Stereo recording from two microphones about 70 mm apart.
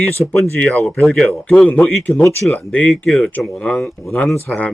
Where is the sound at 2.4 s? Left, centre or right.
Left.